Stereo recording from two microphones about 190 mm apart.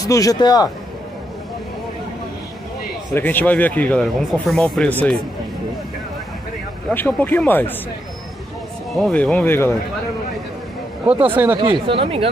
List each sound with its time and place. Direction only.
0.0 s speech: 20° left (ahead or behind)
3.2 s speech: 10° left (ahead or behind)
6.9 s speech: 10° left (ahead or behind)
8.9 s speech: 5° left (ahead or behind)
11.2 s speech: 10° right (ahead or behind)
11.6 s speech: 25° right (ahead or behind)